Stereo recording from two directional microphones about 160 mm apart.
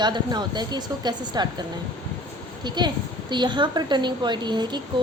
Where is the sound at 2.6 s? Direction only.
30° right (ahead or behind).